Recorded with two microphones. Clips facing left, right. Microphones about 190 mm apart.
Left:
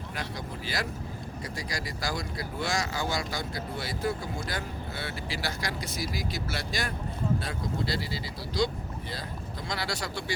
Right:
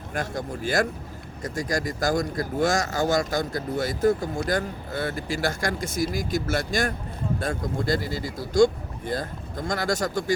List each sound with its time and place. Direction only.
0.1 s speech: 50° right (ahead or behind)